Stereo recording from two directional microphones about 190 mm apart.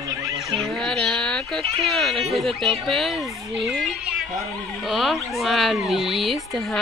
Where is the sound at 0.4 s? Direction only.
Centre (ahead or behind).